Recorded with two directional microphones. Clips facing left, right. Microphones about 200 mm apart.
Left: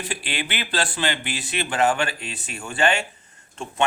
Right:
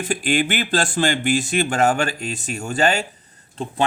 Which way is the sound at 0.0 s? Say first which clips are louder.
Right 9 dB; 45° right (ahead or behind).